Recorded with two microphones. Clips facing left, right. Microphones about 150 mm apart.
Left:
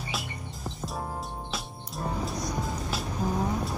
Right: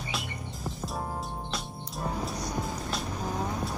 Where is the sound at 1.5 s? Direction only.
Centre (ahead or behind).